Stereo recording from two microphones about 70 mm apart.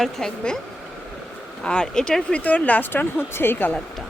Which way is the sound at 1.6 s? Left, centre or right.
Centre.